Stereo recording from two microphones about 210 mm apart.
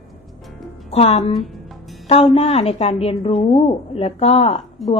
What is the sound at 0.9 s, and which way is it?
A woman's voice, 30° left (ahead or behind).